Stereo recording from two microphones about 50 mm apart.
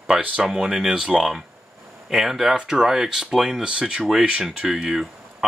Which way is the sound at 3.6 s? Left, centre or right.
Right.